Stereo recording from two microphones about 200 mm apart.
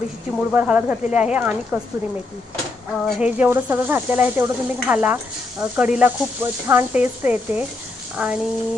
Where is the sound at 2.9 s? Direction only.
Centre (ahead or behind).